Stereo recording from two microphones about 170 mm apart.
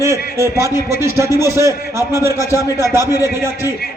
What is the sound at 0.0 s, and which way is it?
A man's voice, 15° right (ahead or behind).